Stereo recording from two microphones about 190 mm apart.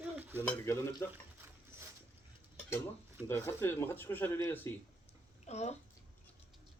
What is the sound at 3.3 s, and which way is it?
Speech, 15° left (ahead or behind).